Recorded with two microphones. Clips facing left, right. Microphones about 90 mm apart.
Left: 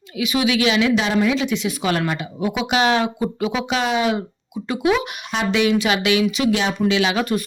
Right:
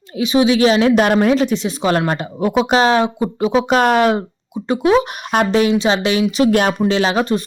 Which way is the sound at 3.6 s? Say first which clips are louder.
Right 7 dB; 50° right (ahead or behind).